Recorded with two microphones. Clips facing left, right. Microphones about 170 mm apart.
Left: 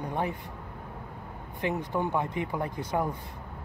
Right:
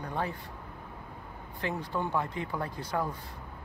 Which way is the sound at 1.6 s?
20° left (ahead or behind).